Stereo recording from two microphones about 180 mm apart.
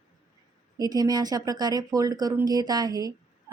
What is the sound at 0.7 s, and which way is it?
Speech, 20° right (ahead or behind).